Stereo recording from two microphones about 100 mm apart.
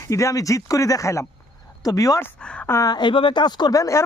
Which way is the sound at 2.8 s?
50° left (ahead or behind).